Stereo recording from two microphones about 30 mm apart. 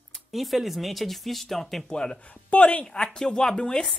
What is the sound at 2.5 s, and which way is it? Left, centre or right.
Speech, left.